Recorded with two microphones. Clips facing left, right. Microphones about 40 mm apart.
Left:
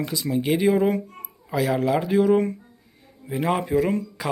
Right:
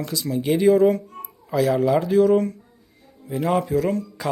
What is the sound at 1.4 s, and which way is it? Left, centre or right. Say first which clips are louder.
Speech: right 3 dB; centre.